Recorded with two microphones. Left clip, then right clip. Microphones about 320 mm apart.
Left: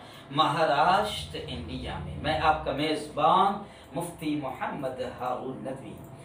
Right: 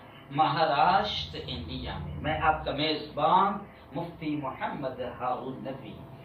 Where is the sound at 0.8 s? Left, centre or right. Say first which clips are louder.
Even; centre.